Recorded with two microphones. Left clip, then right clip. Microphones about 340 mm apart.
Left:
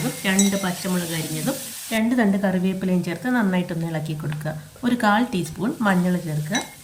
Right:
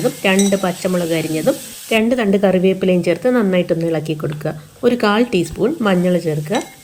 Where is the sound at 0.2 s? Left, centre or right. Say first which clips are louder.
Right 5 dB; centre.